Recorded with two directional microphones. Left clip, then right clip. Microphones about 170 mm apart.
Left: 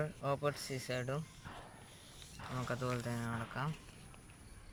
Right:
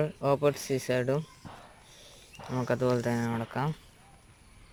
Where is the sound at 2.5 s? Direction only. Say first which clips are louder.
Right 12 dB; 40° right (ahead or behind).